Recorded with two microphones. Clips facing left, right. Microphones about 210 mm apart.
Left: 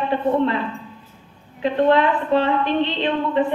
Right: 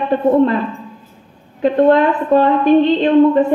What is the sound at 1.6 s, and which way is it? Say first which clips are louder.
A woman's voice: right 5 dB; 45° right (ahead or behind).